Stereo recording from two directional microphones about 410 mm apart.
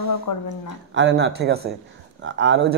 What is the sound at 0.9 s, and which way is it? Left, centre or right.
Speech, right.